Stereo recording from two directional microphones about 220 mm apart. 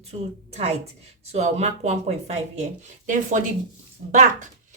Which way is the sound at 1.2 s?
30° right (ahead or behind).